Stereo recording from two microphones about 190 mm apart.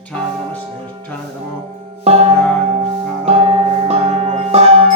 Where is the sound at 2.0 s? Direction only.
35° right (ahead or behind).